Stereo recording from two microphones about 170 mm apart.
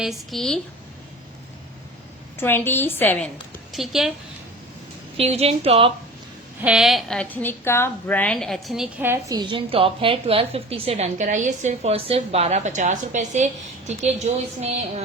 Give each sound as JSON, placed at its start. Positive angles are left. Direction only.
{"t": 0.0, "sound": "a woman's voice", "side_deg": 0}
{"t": 2.4, "sound": "a woman's voice", "side_deg": 10}
{"t": 3.7, "sound": "a woman's voice", "side_deg": 0}
{"t": 5.1, "sound": "a woman's voice", "side_deg": -35}
{"t": 6.6, "sound": "a woman's voice", "side_deg": -5}
{"t": 9.0, "sound": "a woman's voice", "side_deg": -20}